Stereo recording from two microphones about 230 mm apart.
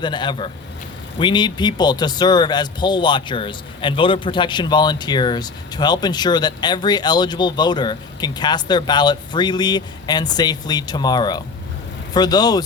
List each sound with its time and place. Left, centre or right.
0.0 s speech: centre